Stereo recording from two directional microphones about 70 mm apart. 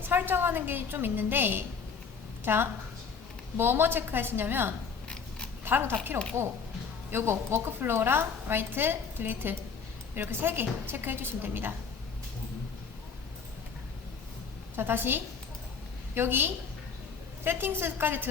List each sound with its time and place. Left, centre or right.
0.0 s a woman's voice: right
14.8 s a woman's voice: right